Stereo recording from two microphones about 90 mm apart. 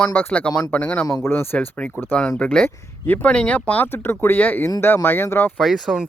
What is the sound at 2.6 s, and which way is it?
Speech, 20° left (ahead or behind).